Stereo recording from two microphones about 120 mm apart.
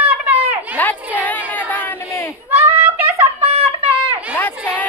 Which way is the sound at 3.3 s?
55° right (ahead or behind).